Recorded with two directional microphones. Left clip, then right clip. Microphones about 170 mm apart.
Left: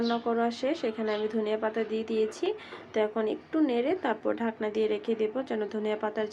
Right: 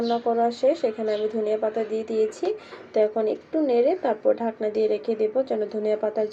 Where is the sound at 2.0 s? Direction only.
40° left (ahead or behind).